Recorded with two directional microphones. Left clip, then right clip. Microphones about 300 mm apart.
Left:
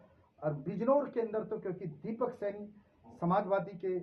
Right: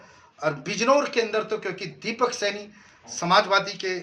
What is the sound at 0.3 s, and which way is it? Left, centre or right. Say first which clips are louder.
Speech: right 11 dB; right.